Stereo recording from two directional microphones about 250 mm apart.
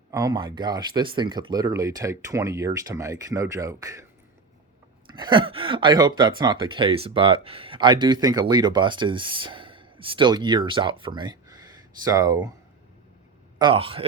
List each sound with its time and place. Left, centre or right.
0.1 s speech: centre
5.1 s speech: centre
13.6 s speech: right